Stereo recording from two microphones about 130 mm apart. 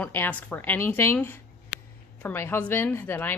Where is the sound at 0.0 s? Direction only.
15° left (ahead or behind).